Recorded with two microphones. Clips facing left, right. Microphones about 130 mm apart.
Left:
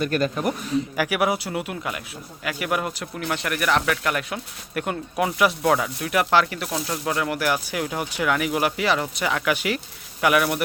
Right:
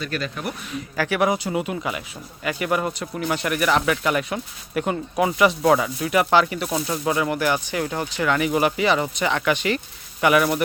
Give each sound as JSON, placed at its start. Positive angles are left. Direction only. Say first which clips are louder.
{"t": 0.0, "sound": "a man's voice", "louder": "left 5 dB", "side_deg": 45}
{"t": 0.9, "sound": "speech", "louder": "right 5 dB", "side_deg": 10}